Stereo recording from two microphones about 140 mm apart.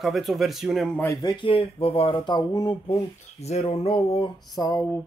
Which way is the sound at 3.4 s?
50° left (ahead or behind).